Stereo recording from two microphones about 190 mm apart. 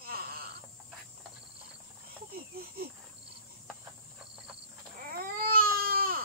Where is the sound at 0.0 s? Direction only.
55° right (ahead or behind).